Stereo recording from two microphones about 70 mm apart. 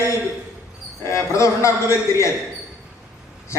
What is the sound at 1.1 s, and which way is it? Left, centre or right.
A man's voice, left.